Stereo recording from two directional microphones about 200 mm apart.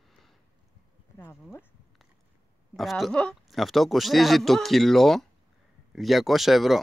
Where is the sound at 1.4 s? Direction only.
Centre (ahead or behind).